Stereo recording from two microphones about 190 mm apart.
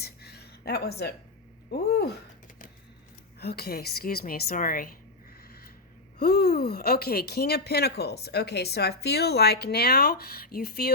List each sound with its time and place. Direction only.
0.0 s a sound: 60° left (ahead or behind)
3.4 s a woman's voice: 55° left (ahead or behind)
6.1 s speech: 55° left (ahead or behind)